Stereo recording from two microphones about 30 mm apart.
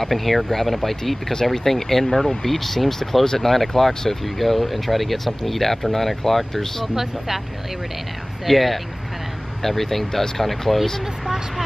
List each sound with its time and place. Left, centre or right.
0.0 s speech: centre
7.0 s speech: centre
8.5 s speech: centre